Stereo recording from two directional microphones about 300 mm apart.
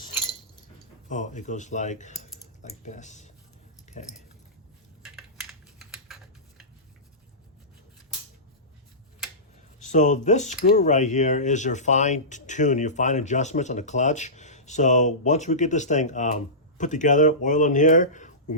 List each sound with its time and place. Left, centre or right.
1.0 s speech: left
3.9 s a sound: left
5.0 s typing: centre
9.9 s speech: left